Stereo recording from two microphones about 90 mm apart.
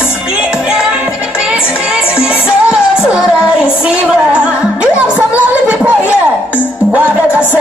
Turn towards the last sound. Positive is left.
turn(degrees=-15)  # may be behind; listen again after turning